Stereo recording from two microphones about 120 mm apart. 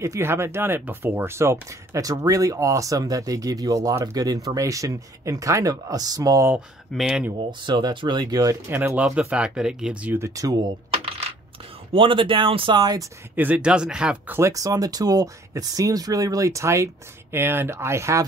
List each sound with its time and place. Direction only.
0.0 s speech: 25° right (ahead or behind)
6.9 s speech: 5° right (ahead or behind)
7.3 s speech: 40° right (ahead or behind); by 10.1 s 5° right (ahead or behind)
10.1 s speech: 25° right (ahead or behind)
11.9 s speech: 45° right (ahead or behind)
13.4 s speech: 10° right (ahead or behind)
14.5 s speech: 30° right (ahead or behind)